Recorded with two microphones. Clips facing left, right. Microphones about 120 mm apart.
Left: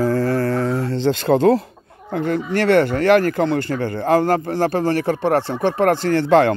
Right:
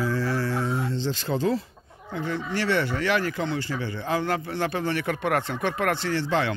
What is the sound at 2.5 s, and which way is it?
Speech, 55° left (ahead or behind).